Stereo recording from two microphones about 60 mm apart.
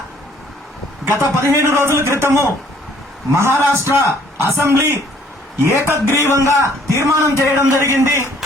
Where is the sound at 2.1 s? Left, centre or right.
Right.